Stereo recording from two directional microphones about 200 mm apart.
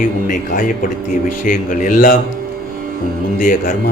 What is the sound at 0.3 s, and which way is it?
Speech, 40° left (ahead or behind).